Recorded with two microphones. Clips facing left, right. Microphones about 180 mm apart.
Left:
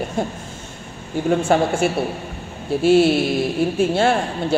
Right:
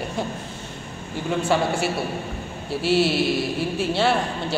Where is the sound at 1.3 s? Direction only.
50° left (ahead or behind).